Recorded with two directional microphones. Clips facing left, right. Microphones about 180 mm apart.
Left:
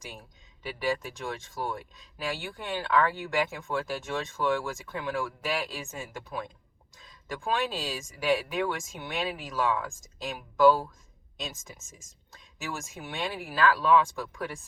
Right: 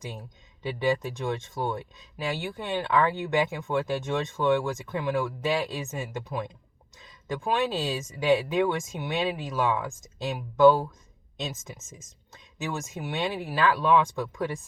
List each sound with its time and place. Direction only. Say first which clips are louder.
0.0 s speech: right 5 dB; 20° right (ahead or behind)